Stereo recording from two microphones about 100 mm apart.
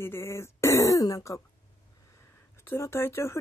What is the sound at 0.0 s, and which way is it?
Speech, 25° left (ahead or behind).